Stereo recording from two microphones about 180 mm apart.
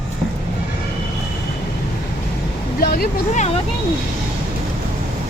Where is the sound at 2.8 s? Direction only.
55° left (ahead or behind).